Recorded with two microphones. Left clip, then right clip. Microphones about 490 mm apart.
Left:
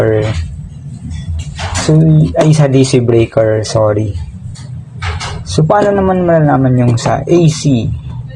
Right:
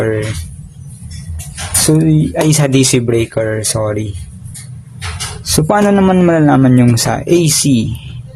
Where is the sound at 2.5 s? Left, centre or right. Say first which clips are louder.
Left 2 dB; right.